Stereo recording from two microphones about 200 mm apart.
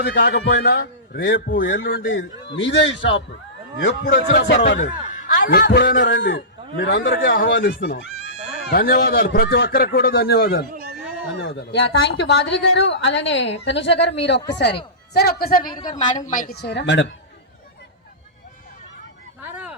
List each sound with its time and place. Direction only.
0.0 s a man's voice: 55° left (ahead or behind)
1.6 s a woman's voice: 65° left (ahead or behind)
4.0 s speech: 40° left (ahead or behind)
4.8 s a sound: 40° left (ahead or behind)
5.5 s a woman's voice: 50° left (ahead or behind); by 7.2 s 70° left (ahead or behind)
7.3 s a man's voice: 45° left (ahead or behind)
15.6 s a woman's voice: 20° left (ahead or behind)
16.0 s a man's voice: 40° left (ahead or behind); by 17.1 s 60° left (ahead or behind)
19.4 s a sound: 5° right (ahead or behind)